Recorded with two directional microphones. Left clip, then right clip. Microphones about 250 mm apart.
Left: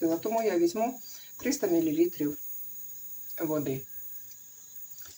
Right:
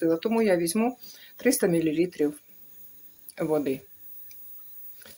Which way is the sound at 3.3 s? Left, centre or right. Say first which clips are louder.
Right 5 dB; right.